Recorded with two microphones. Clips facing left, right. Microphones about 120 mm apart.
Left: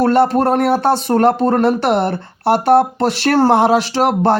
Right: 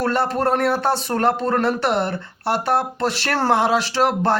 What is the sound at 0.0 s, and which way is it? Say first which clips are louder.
Speech: left 7 dB; 60° left (ahead or behind).